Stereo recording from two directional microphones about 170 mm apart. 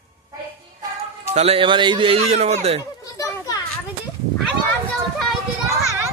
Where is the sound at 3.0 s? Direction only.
20° left (ahead or behind).